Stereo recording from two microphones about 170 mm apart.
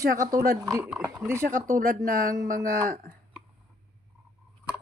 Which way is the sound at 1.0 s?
15° right (ahead or behind).